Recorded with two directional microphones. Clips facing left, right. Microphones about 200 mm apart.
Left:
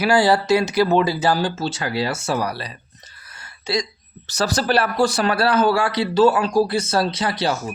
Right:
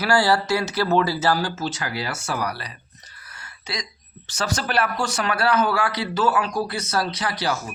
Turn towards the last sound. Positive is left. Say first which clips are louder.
# left 4 dB
turn(degrees=25)  # may be behind; listen again after turning